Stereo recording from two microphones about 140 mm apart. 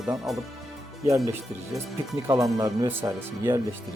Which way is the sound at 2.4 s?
25° right (ahead or behind).